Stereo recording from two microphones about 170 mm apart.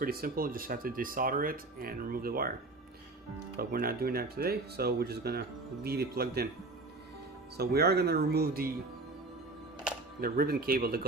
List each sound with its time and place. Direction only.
0.0 s speech: 60° right (ahead or behind)
3.5 s speech: 60° right (ahead or behind)
7.5 s speech: 70° right (ahead or behind)
10.2 s speech: 60° right (ahead or behind)